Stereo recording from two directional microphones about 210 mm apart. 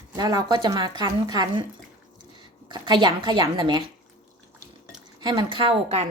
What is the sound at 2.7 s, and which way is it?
Speech, 20° right (ahead or behind).